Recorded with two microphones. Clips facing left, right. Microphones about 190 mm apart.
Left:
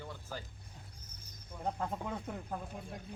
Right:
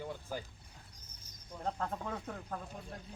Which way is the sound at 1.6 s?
10° left (ahead or behind).